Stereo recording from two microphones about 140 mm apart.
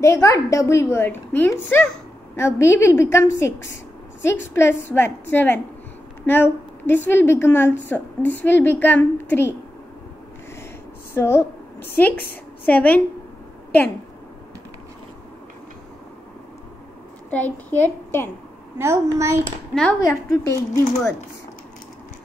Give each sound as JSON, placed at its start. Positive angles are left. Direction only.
{"t": 0.0, "sound": "a woman's voice", "side_deg": 20}
{"t": 11.1, "sound": "a woman's voice", "side_deg": 15}
{"t": 17.3, "sound": "a woman's voice", "side_deg": 10}
{"t": 18.8, "sound": "a child's voice", "side_deg": -20}
{"t": 19.7, "sound": "a woman's voice", "side_deg": 5}
{"t": 20.1, "sound": "a woman's voice", "side_deg": 20}